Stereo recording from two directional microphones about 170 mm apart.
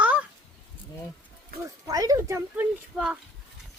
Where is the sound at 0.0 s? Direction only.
10° right (ahead or behind).